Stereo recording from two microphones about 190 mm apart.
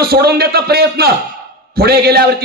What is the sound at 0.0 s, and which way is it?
A man's voice, 55° right (ahead or behind).